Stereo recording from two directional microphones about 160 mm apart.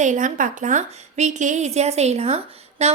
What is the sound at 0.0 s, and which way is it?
A woman's voice, 50° right (ahead or behind).